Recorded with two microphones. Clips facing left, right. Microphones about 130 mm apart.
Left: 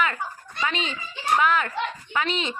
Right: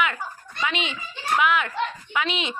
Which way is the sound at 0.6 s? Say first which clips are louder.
Even; 20° right (ahead or behind).